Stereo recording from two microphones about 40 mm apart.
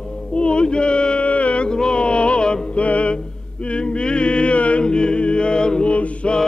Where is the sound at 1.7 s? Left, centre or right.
Left.